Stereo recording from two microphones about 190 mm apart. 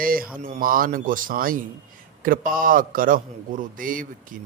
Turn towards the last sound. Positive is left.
turn(degrees=-45)  # may be behind; listen again after turning